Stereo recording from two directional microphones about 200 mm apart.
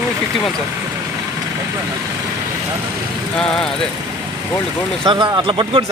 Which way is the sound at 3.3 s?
5° left (ahead or behind).